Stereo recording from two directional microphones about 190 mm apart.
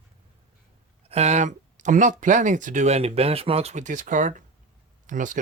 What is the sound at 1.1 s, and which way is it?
Speech, 35° right (ahead or behind).